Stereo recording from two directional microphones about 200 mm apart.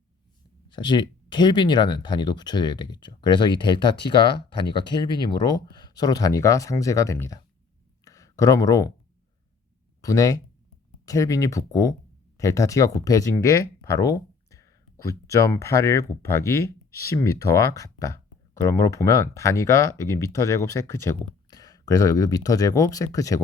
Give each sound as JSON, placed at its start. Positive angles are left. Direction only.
{"t": 0.7, "sound": "speech", "side_deg": 20}
{"t": 8.0, "sound": "a sound", "side_deg": 15}
{"t": 10.0, "sound": "speech", "side_deg": 15}